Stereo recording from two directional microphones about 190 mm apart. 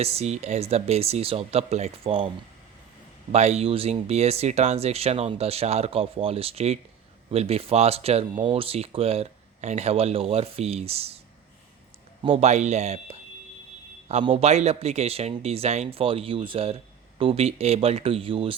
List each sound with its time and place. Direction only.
0.0 s speech: 35° right (ahead or behind)
3.3 s speech: 35° right (ahead or behind)
12.2 s speech: 30° right (ahead or behind)